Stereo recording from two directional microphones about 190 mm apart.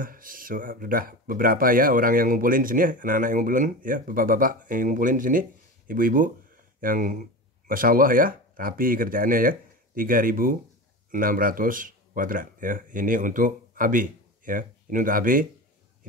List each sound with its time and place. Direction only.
0.0 s speech: 45° right (ahead or behind)